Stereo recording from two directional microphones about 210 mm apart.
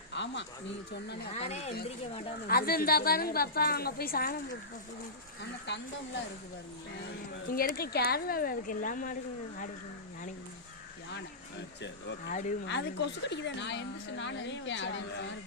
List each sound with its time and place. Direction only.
0.1 s a sound: 60° left (ahead or behind)
0.9 s a woman's voice: 50° left (ahead or behind)
1.3 s speech: 30° left (ahead or behind)
2.5 s a woman's voice: 45° left (ahead or behind)
5.4 s a woman's voice: 55° left (ahead or behind)
7.5 s a woman's voice: 45° left (ahead or behind)
11.8 s a woman's voice: 55° left (ahead or behind)
12.3 s speech: 35° left (ahead or behind)
12.6 s a woman's voice: 55° left (ahead or behind)